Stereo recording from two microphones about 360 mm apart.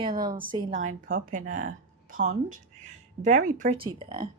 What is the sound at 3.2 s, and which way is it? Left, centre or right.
Speech, right.